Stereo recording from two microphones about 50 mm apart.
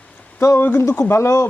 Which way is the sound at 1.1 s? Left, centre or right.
Left.